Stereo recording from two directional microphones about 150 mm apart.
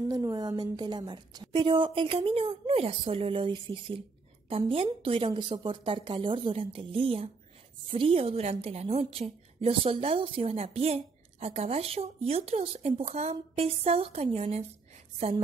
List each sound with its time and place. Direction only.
0.1 s a woman's voice: 25° right (ahead or behind); by 15.4 s 40° right (ahead or behind)